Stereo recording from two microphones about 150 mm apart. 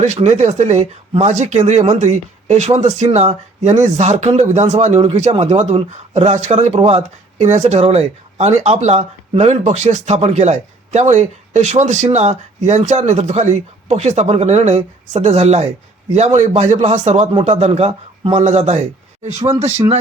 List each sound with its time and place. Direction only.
0.0 s speech: 50° right (ahead or behind)